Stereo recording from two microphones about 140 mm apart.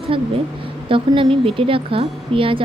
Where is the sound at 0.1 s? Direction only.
40° right (ahead or behind).